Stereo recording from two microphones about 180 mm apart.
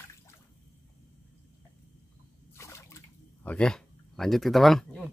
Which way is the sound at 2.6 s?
15° left (ahead or behind).